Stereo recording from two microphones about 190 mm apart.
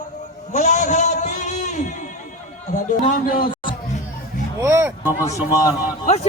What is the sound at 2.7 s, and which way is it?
Speech, 40° left (ahead or behind).